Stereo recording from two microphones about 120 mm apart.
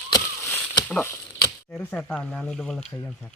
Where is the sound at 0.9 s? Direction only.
20° left (ahead or behind).